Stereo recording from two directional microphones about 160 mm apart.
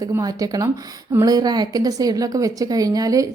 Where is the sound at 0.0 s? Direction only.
25° right (ahead or behind).